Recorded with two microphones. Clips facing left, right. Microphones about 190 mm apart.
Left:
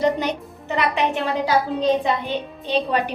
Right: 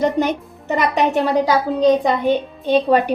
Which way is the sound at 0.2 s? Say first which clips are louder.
Right 6 dB; 50° right (ahead or behind).